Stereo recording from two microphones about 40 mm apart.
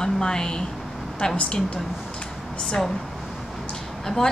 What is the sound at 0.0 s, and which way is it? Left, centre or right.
Speech, centre.